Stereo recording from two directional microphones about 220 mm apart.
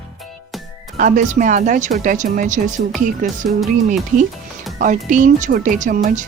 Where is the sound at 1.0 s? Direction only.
35° right (ahead or behind).